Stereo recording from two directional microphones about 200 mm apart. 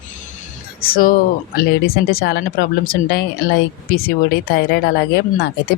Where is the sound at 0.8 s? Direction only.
45° left (ahead or behind).